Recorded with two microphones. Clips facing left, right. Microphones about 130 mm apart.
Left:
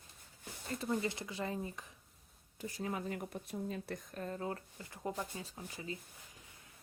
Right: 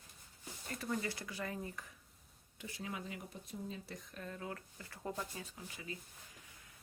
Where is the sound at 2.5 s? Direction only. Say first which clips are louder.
Left 5 dB; 40° left (ahead or behind); by 4.0 s 60° left (ahead or behind).